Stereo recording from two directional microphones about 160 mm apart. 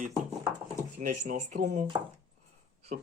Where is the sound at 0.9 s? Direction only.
55° right (ahead or behind).